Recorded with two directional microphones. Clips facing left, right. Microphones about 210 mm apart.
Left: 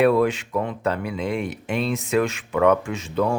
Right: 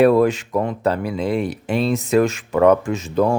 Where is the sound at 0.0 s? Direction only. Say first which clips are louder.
Right 4 dB; 40° right (ahead or behind).